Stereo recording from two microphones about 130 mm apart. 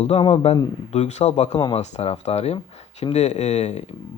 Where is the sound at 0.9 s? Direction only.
60° left (ahead or behind).